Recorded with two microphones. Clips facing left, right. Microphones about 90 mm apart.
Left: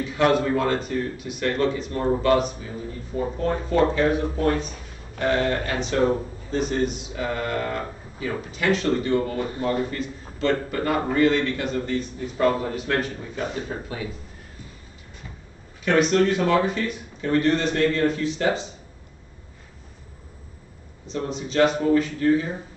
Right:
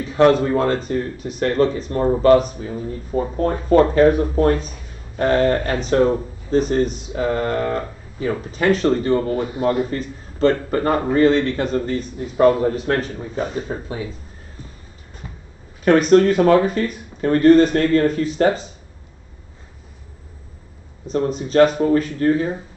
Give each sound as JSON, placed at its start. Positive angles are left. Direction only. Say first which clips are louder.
{"t": 0.0, "sound": "speech", "louder": "right 6 dB", "side_deg": -35}
{"t": 9.5, "sound": "a man's voice", "louder": "right 5 dB", "side_deg": -20}
{"t": 9.8, "sound": "speech", "louder": "right 4 dB", "side_deg": -35}
{"t": 15.8, "sound": "speech", "louder": "right 6 dB", "side_deg": -45}
{"t": 21.1, "sound": "speech", "louder": "right 8 dB", "side_deg": -45}